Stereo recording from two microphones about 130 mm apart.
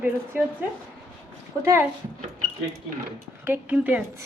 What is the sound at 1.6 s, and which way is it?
Speech, 20° right (ahead or behind).